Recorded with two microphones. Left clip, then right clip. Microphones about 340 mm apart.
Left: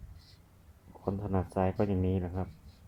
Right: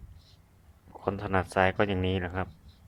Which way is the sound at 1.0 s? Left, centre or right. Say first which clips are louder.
Right 6 dB; right.